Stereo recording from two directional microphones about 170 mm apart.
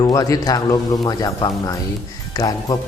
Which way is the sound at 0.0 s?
20° left (ahead or behind).